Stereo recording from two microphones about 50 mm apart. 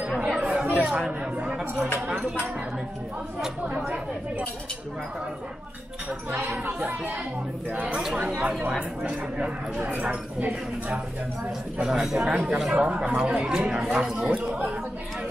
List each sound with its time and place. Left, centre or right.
0.2 s chatter: centre
0.5 s chatter: right
0.7 s speech: centre
7.7 s speech: right
9.8 s speech: right
11.8 s speech: centre
12.3 s speech: right